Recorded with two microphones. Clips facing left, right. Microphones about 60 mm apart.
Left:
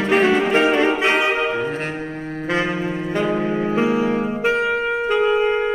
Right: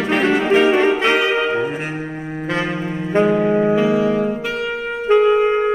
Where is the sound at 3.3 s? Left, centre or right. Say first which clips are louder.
Right 6 dB; centre.